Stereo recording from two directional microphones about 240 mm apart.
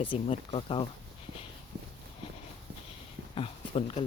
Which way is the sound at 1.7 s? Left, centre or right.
Right.